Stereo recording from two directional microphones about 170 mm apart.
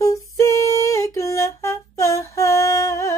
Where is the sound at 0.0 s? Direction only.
20° left (ahead or behind).